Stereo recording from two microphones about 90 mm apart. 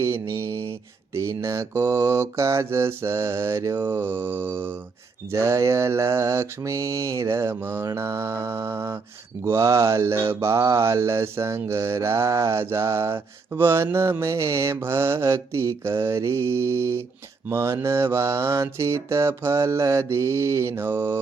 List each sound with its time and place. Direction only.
0.0 s mantra: 30° right (ahead or behind)